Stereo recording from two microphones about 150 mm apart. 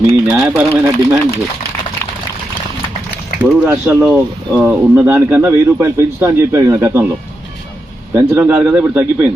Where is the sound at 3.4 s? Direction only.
15° left (ahead or behind).